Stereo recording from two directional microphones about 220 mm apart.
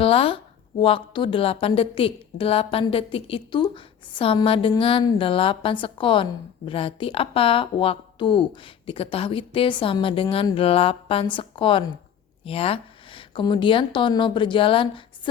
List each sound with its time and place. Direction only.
0.0 s a woman's voice: 25° left (ahead or behind)